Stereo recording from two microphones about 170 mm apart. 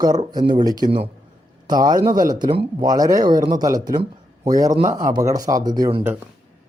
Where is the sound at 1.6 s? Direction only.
25° right (ahead or behind).